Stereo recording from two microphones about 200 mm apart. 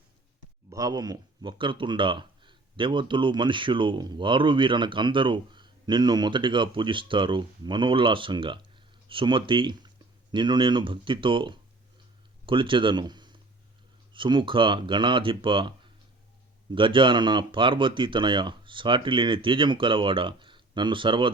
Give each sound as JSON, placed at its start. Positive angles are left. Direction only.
{"t": 0.7, "sound": "speech", "side_deg": -20}